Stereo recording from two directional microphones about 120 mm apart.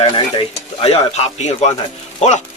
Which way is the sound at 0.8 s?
65° left (ahead or behind).